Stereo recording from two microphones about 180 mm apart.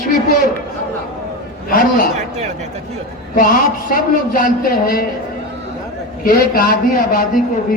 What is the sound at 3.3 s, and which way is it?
A man's voice, 50° left (ahead or behind).